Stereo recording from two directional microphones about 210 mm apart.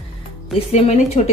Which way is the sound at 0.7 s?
30° left (ahead or behind).